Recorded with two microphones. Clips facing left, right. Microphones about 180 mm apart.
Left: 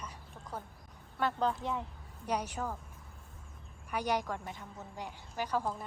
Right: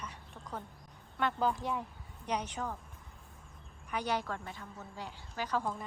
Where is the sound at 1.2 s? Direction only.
5° right (ahead or behind).